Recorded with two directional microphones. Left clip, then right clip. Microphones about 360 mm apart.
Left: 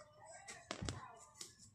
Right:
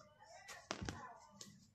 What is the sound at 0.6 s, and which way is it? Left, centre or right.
Music, centre.